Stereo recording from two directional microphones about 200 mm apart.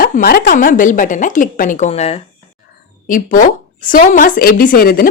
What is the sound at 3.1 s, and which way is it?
A woman's voice, 40° left (ahead or behind).